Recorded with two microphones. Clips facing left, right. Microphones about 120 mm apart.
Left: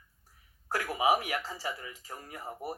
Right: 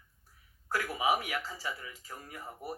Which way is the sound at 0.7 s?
30° left (ahead or behind).